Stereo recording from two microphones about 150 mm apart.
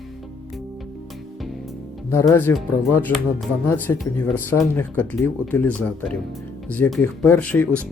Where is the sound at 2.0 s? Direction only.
20° left (ahead or behind).